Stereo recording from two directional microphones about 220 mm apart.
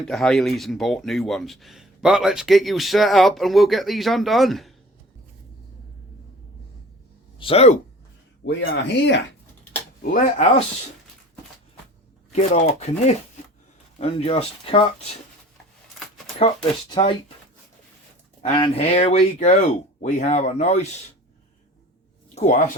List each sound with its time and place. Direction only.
0.0 s speech: centre (ahead or behind)
7.3 s speech: 25° left (ahead or behind)
8.4 s speech: 50° left (ahead or behind)
10.0 s speech: 35° left (ahead or behind)
12.3 s speech: 30° left (ahead or behind)
16.9 s speech: 20° left (ahead or behind)
18.4 s speech: 25° left (ahead or behind)
22.4 s speech: 35° left (ahead or behind)